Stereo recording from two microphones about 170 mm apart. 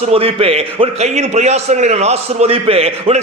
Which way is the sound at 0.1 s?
35° right (ahead or behind).